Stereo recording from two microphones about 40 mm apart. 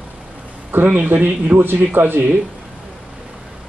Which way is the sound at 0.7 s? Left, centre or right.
Right.